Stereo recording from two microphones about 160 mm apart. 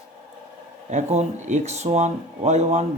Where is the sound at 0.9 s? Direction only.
50° right (ahead or behind).